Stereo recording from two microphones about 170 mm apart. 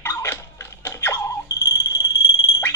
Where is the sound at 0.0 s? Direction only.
15° left (ahead or behind).